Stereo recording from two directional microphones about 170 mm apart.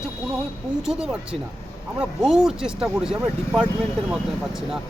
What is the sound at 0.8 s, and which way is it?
Speech, 5° right (ahead or behind).